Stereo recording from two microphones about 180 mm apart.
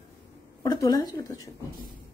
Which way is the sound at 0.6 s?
20° left (ahead or behind).